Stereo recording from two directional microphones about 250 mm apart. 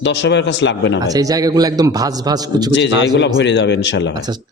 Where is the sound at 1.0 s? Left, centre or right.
Centre.